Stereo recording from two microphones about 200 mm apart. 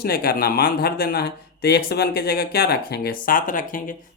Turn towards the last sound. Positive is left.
turn(degrees=40)  # may be behind; listen again after turning